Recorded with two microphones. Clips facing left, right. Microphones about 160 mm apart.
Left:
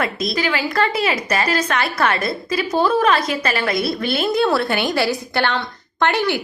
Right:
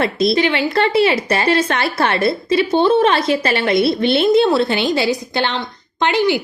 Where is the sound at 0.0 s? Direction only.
30° right (ahead or behind).